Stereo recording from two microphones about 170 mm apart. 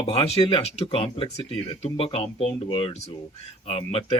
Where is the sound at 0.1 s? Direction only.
30° left (ahead or behind).